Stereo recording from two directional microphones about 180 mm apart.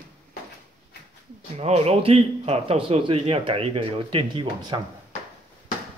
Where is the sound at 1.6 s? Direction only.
35° right (ahead or behind).